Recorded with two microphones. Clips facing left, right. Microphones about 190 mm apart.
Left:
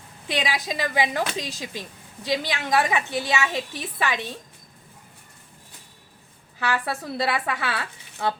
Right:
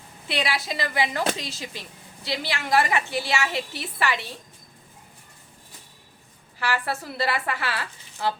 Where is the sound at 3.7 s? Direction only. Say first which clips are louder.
Even; 15° left (ahead or behind).